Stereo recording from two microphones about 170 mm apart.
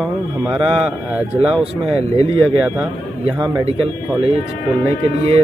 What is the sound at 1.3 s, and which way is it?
Speech, 35° right (ahead or behind).